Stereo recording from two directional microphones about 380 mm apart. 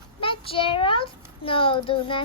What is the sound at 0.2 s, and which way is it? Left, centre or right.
A child's voice, centre.